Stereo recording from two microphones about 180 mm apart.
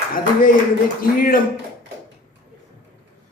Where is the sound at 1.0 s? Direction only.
50° left (ahead or behind).